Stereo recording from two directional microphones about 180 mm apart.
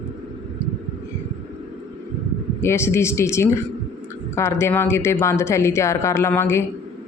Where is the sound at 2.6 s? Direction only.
15° left (ahead or behind).